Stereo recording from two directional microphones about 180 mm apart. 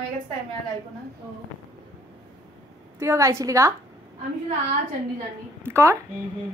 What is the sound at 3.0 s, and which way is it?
Speech, 15° right (ahead or behind).